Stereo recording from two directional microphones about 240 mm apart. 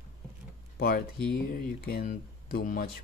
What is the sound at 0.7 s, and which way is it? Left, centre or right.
Speech, left.